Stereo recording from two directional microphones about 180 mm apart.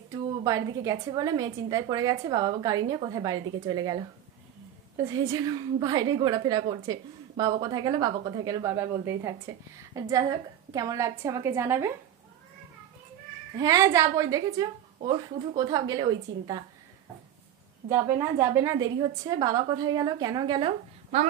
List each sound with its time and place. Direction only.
0.4 s a woman's voice: 20° right (ahead or behind)
13.6 s a woman's voice: 20° right (ahead or behind)
17.8 s a woman's voice: 15° right (ahead or behind)